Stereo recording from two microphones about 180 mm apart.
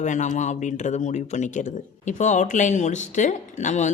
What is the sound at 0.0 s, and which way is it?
Speech, 40° left (ahead or behind).